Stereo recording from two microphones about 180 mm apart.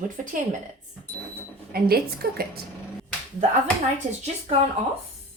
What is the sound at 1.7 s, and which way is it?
Speech, 55° right (ahead or behind).